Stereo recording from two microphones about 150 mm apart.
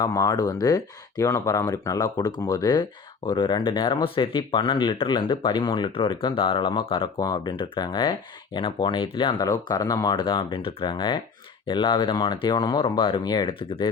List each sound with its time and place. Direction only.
0.0 s speech: 25° left (ahead or behind)